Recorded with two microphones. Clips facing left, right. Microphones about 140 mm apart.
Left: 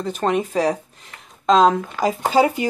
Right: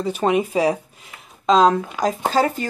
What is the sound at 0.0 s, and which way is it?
Speech, 5° right (ahead or behind).